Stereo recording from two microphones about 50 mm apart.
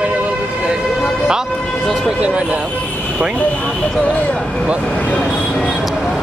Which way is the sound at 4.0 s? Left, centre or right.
Left.